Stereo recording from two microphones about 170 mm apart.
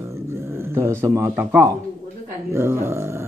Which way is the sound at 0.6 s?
15° right (ahead or behind).